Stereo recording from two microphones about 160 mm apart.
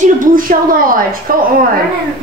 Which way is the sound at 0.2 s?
60° right (ahead or behind).